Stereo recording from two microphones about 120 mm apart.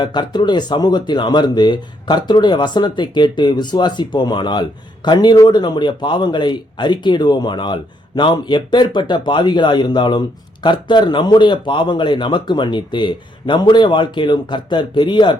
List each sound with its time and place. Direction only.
0.0 s speech: 40° left (ahead or behind)